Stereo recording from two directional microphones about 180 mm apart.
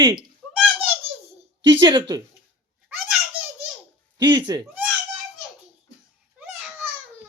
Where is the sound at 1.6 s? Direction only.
25° right (ahead or behind).